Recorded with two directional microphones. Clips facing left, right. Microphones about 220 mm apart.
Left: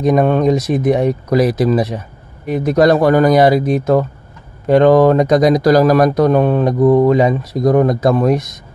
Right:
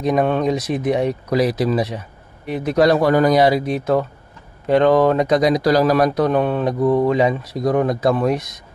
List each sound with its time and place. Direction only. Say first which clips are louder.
0.0 s speech: left 5 dB; 45° left (ahead or behind)